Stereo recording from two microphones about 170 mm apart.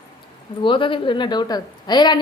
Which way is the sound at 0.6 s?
30° left (ahead or behind).